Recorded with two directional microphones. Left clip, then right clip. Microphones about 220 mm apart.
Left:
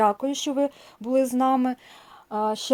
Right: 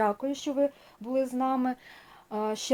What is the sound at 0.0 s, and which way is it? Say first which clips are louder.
Speech: left 6 dB; 35° left (ahead or behind).